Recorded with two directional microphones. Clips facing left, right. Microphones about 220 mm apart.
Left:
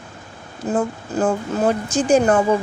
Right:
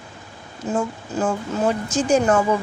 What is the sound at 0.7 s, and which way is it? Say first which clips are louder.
Speech: left 3 dB; 35° left (ahead or behind).